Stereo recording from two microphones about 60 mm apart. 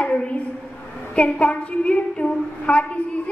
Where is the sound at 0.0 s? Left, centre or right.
Centre.